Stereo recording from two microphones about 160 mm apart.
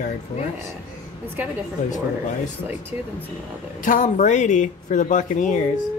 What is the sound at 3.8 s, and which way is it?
Speech, 55° left (ahead or behind).